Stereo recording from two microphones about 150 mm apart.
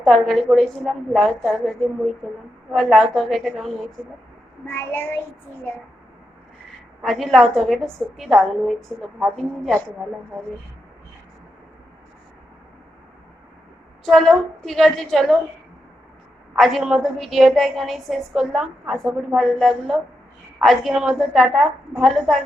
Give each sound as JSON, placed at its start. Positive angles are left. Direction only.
{"t": 0.0, "sound": "a woman's voice", "side_deg": 5}
{"t": 4.6, "sound": "a child's voice", "side_deg": 15}
{"t": 7.0, "sound": "a woman's voice", "side_deg": 0}
{"t": 14.0, "sound": "a woman's voice", "side_deg": 0}
{"t": 16.6, "sound": "a woman's voice", "side_deg": 0}